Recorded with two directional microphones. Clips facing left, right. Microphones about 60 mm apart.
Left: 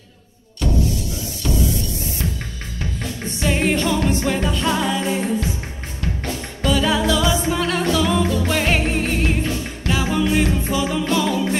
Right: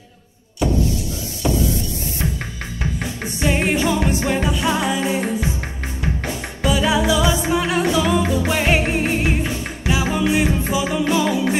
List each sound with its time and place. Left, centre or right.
2.8 s music: right